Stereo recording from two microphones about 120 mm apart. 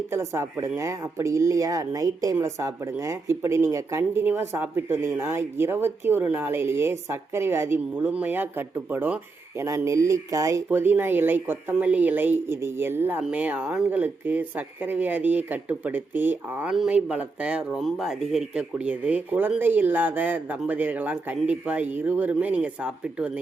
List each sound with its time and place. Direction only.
0.1 s a woman's voice: 25° right (ahead or behind)
9.6 s speech: 25° right (ahead or behind); by 23.4 s 10° right (ahead or behind)